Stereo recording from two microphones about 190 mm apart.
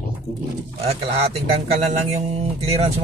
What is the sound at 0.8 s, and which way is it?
Speech, 30° right (ahead or behind).